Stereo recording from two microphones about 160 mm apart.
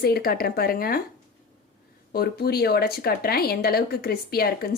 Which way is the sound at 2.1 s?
75° left (ahead or behind).